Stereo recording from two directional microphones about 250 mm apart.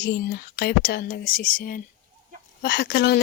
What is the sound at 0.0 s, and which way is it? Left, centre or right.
Speech, left.